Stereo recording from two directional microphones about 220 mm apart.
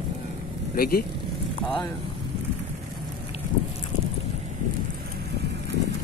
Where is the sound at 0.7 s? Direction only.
40° left (ahead or behind).